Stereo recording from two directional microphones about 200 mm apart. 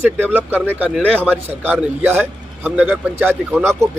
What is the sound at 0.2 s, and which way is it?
Speech, 10° right (ahead or behind).